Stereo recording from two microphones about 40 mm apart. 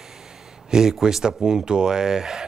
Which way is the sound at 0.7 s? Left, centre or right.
Centre.